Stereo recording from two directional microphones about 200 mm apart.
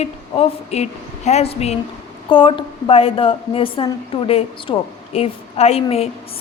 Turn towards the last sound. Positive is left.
turn(degrees=30)  # may be behind; listen again after turning